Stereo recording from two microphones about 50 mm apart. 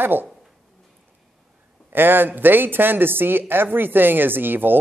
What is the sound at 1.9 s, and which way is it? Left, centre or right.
A man's voice, right.